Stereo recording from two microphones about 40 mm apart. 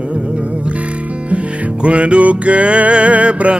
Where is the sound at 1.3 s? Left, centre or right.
Right.